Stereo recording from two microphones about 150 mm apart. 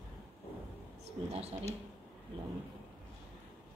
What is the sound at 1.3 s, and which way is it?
Speech, 45° right (ahead or behind).